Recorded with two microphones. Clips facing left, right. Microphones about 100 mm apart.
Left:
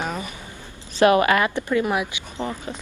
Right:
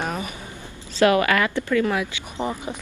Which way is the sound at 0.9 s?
25° left (ahead or behind).